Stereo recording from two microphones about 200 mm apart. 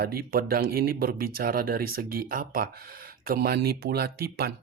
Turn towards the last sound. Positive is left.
turn(degrees=-50)  # may be behind; listen again after turning